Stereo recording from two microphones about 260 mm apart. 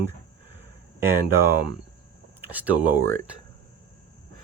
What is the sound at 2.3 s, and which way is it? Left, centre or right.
Speech, centre.